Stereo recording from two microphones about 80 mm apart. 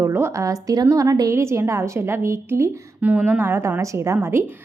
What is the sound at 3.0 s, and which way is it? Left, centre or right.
A woman's voice, centre.